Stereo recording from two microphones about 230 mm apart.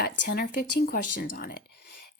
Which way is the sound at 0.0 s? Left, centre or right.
Left.